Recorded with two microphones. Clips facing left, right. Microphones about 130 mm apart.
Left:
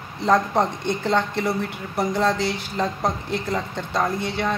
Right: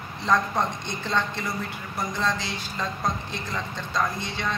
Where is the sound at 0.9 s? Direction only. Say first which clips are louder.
Left 6 dB; 60° left (ahead or behind).